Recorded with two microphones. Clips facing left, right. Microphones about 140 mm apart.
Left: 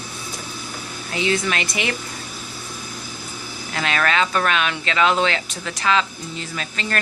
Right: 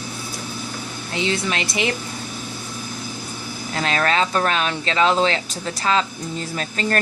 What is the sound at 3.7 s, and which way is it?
Speech, 35° right (ahead or behind).